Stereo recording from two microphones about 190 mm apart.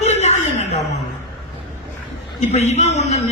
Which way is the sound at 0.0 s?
35° left (ahead or behind).